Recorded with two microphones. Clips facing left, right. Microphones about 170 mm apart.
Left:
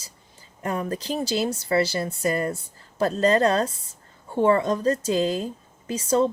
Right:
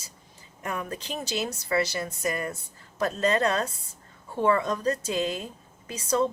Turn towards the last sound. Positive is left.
turn(degrees=30)  # may be behind; listen again after turning